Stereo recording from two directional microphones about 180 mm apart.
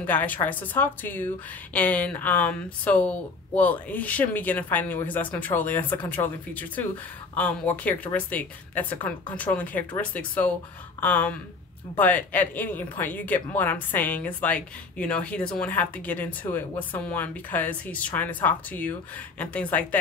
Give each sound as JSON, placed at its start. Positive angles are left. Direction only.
{"t": 0.0, "sound": "a woman's voice", "side_deg": 10}